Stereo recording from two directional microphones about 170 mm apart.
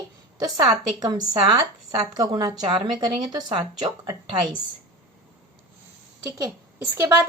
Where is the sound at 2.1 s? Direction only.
20° right (ahead or behind).